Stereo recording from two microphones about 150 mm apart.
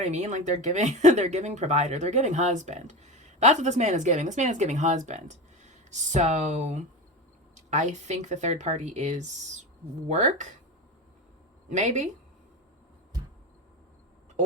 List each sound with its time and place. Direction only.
0.0 s speech: 50° right (ahead or behind)
11.7 s speech: 50° right (ahead or behind)